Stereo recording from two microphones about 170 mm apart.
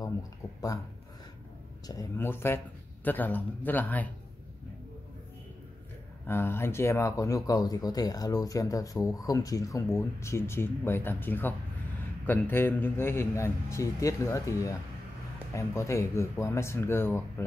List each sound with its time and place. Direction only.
1.9 s speech: 15° left (ahead or behind)
6.2 s speech: 15° left (ahead or behind)